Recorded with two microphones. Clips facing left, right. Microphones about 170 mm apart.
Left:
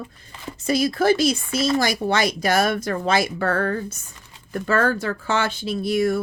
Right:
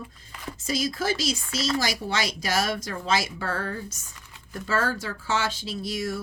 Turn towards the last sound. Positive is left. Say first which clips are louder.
# left 9 dB
turn(degrees=60)  # may be behind; listen again after turning